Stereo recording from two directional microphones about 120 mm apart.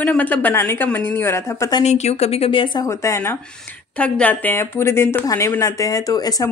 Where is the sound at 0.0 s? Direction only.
10° left (ahead or behind).